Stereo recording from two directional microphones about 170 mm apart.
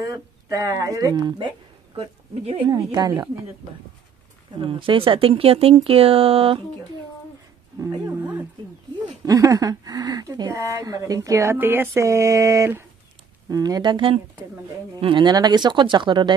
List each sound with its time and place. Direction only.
0.0 s speech: 20° right (ahead or behind)
2.7 s speech: 25° right (ahead or behind)
4.6 s speech: 30° right (ahead or behind)
9.2 s speech: 20° right (ahead or behind)